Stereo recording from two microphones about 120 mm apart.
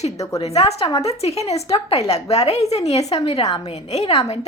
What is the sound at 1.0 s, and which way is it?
A woman's voice, 60° left (ahead or behind).